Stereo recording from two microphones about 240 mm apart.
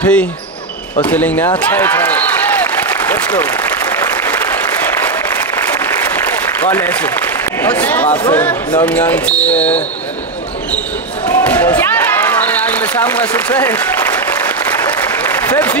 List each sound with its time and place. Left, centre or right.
0.0 s speech: centre
2.6 s applause: centre
6.6 s speech: centre
11.2 s speech: centre
14.9 s applause: centre